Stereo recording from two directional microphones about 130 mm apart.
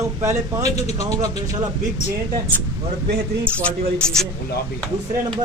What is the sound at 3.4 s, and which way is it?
Speech, 10° left (ahead or behind).